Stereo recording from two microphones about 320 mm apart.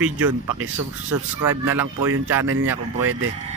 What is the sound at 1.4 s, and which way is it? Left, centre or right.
Speech, centre.